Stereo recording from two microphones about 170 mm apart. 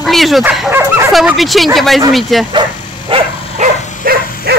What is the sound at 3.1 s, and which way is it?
Dog, 30° right (ahead or behind).